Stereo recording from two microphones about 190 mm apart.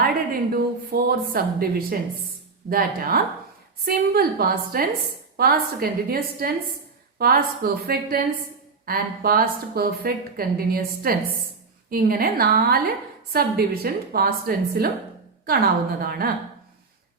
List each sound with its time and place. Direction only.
0.5 s a woman's voice: 50° right (ahead or behind)